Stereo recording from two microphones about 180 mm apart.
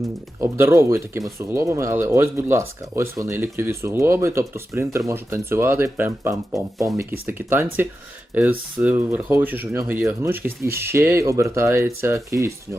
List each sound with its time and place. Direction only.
0.3 s speech: 15° right (ahead or behind)
6.3 s speech: centre (ahead or behind)
6.9 s speech: 15° right (ahead or behind)